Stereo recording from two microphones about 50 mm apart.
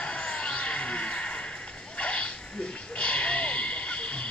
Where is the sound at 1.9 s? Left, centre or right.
Left.